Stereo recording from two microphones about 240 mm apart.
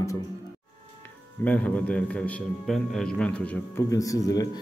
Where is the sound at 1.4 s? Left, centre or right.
Centre.